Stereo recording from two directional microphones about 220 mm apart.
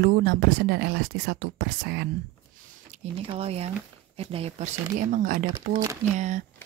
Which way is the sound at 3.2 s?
25° right (ahead or behind).